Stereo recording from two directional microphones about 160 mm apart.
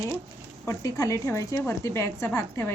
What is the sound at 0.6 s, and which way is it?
A woman's voice, 20° left (ahead or behind).